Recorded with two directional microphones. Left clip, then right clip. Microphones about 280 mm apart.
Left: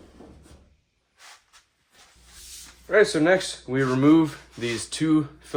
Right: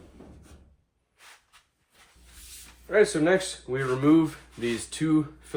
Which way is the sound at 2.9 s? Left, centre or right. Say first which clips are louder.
Left 3 dB; left.